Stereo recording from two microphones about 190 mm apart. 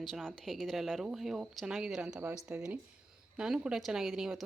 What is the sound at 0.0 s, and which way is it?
A woman's voice, centre (ahead or behind).